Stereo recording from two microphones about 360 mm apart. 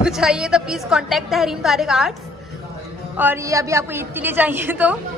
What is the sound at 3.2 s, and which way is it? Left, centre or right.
A woman's voice, centre.